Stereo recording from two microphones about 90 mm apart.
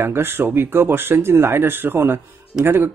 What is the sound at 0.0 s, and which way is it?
Speech, 25° right (ahead or behind).